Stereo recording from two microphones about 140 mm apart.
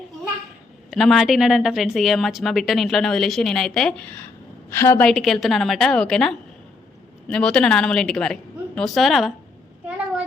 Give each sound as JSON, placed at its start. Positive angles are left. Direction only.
{"t": 0.9, "sound": "a woman's voice", "side_deg": 0}
{"t": 4.7, "sound": "a woman's voice", "side_deg": 15}
{"t": 5.0, "sound": "a woman's voice", "side_deg": 0}